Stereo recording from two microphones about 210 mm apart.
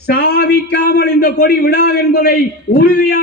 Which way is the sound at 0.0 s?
50° left (ahead or behind).